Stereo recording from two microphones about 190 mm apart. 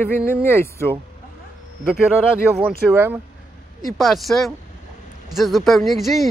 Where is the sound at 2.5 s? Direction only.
10° right (ahead or behind).